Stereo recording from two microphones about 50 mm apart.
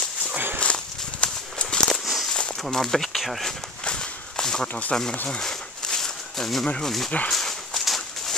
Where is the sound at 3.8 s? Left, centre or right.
Centre.